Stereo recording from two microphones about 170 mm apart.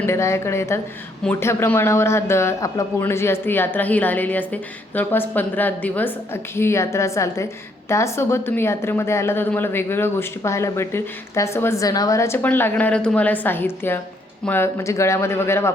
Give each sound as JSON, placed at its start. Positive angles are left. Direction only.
{"t": 0.0, "sound": "speech", "side_deg": 15}